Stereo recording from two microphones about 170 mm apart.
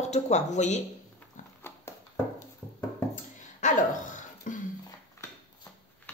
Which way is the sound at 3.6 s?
45° left (ahead or behind).